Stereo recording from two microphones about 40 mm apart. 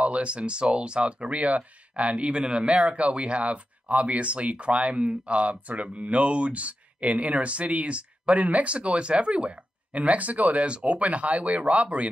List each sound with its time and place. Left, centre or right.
0.0 s speech: right